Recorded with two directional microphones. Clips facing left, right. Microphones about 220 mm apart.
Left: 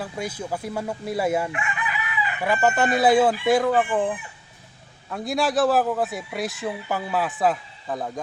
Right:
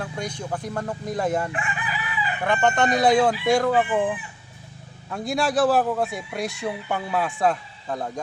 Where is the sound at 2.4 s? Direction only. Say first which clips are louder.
Even; 5° left (ahead or behind).